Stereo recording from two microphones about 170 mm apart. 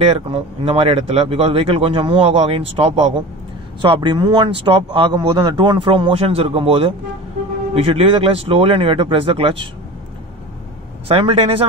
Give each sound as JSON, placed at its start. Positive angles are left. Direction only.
{"t": 0.0, "sound": "speech", "side_deg": -35}
{"t": 11.1, "sound": "speech", "side_deg": -35}